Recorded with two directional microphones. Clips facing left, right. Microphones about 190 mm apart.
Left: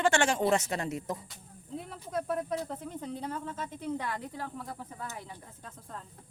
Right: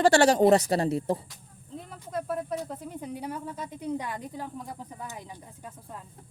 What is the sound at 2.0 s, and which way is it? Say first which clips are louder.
Speech: right 1 dB; centre (ahead or behind).